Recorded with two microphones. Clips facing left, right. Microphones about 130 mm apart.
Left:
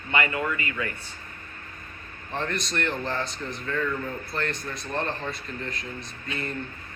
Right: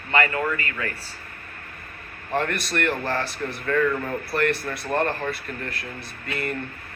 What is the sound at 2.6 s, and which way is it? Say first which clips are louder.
A man's voice: right 4 dB; 60° right (ahead or behind).